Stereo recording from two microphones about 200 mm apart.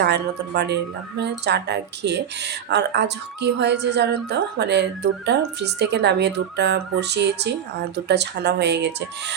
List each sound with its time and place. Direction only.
0.0 s speech: 55° right (ahead or behind)